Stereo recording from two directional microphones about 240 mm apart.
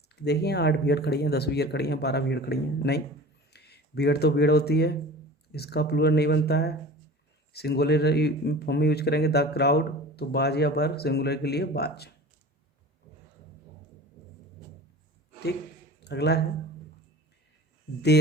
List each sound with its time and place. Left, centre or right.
0.2 s speech: left
16.0 s speech: left